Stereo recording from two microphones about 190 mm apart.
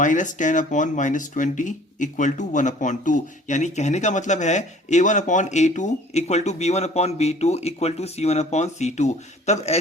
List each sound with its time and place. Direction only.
0.0 s speech: 40° left (ahead or behind)